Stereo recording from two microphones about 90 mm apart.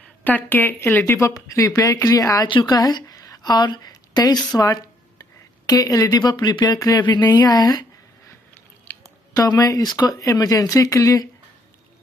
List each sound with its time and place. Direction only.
0.2 s a woman's voice: 20° left (ahead or behind); by 2.4 s 40° left (ahead or behind)
2.4 s a woman's voice: 55° left (ahead or behind)
5.7 s speech: 45° left (ahead or behind)
8.9 s chewing: 20° left (ahead or behind)
9.3 s speech: 45° left (ahead or behind)